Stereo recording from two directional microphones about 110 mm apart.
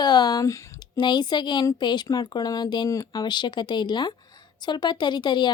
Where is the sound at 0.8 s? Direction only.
45° left (ahead or behind).